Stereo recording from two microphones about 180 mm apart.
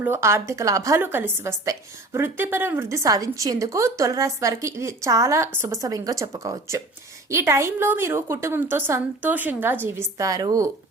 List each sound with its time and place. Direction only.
0.0 s a woman's voice: 15° right (ahead or behind)